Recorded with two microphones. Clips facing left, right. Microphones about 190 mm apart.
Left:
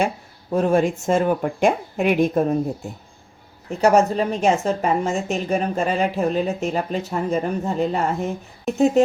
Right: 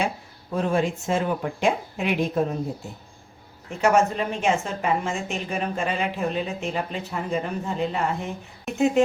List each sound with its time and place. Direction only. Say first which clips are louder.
0.5 s speech: left 5 dB; 45° left (ahead or behind)
3.8 s a woman's voice: left 4 dB; 35° left (ahead or behind)